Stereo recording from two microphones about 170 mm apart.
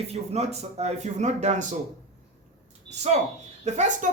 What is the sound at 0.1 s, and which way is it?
A man's voice, 40° right (ahead or behind).